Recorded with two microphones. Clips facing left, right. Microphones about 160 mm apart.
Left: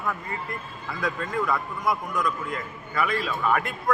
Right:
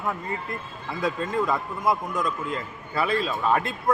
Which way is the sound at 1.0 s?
25° right (ahead or behind).